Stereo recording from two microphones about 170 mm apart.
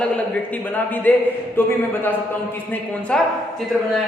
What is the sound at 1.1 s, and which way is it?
Speech, 10° left (ahead or behind).